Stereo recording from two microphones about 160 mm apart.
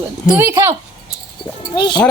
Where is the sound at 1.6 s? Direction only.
30° left (ahead or behind).